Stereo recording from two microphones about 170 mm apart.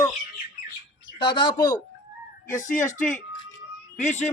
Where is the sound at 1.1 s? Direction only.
30° left (ahead or behind).